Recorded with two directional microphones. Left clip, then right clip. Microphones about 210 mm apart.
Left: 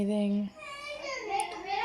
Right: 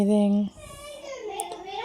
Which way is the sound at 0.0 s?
45° right (ahead or behind).